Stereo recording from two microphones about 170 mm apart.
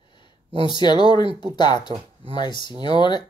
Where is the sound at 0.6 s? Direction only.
25° left (ahead or behind).